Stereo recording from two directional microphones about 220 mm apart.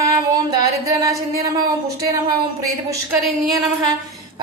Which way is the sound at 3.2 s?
Centre (ahead or behind).